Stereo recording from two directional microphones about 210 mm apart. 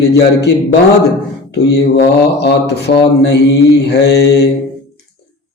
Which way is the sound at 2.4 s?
50° left (ahead or behind).